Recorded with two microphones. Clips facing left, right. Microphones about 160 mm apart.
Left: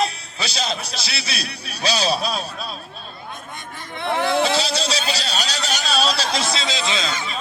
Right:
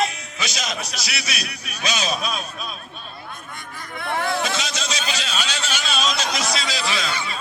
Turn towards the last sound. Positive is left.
turn(degrees=20)  # may be behind; listen again after turning